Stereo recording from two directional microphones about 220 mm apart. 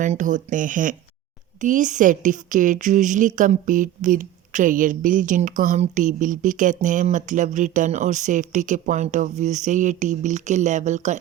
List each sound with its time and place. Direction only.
0.0 s a woman's voice: 35° right (ahead or behind)